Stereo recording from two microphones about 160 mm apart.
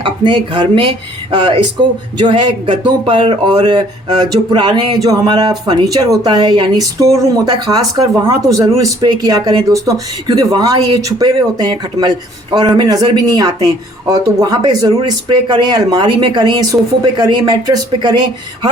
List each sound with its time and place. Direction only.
0.0 s speech: 30° right (ahead or behind)